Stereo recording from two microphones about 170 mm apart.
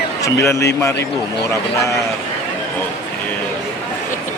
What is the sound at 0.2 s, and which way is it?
Speech, 20° left (ahead or behind).